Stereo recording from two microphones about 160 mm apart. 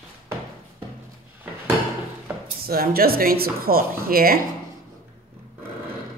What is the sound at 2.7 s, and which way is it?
Speech, 70° right (ahead or behind).